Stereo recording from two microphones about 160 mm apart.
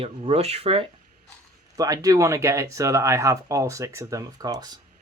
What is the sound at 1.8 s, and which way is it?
Speech, 20° right (ahead or behind).